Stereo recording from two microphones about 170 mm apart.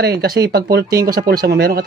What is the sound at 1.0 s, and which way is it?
Speech, 60° right (ahead or behind).